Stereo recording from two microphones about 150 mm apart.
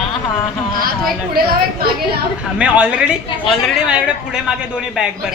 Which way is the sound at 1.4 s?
75° right (ahead or behind).